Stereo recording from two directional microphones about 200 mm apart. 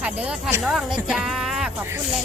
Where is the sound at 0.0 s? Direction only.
5° right (ahead or behind).